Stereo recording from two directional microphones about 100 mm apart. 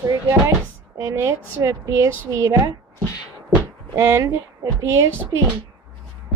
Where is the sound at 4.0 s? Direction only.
30° right (ahead or behind).